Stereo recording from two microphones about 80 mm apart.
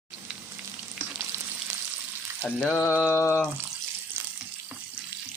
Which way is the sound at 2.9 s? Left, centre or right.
Centre.